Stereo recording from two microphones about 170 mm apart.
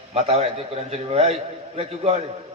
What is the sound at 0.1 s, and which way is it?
A man's voice, 40° right (ahead or behind).